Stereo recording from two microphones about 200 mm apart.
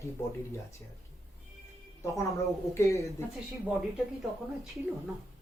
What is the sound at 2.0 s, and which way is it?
A man's voice, 15° left (ahead or behind).